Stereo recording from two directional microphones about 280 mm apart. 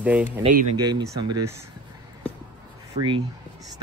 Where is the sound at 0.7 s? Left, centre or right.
Centre.